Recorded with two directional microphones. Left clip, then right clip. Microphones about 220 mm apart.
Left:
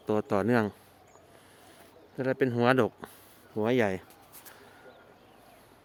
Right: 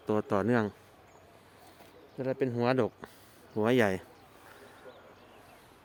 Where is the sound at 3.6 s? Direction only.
Centre (ahead or behind).